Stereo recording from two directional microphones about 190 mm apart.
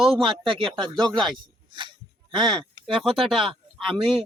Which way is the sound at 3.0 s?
Centre (ahead or behind).